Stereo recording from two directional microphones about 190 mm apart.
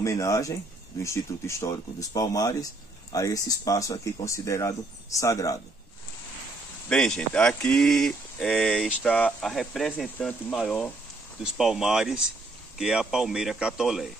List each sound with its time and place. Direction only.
0.0 s speech: 15° left (ahead or behind)
6.9 s speech: 5° left (ahead or behind)